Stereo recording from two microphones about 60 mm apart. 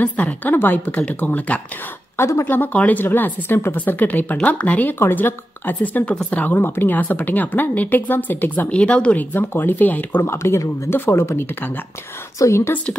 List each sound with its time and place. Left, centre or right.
0.0 s speech: left
0.9 s speech: left
2.1 s speech: left
2.4 s speech: left
7.0 s speech: left
10.2 s speech: left
12.4 s speech: left